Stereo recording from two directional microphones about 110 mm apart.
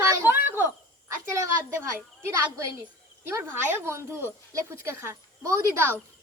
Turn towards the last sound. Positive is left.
turn(degrees=-20)  # may be behind; listen again after turning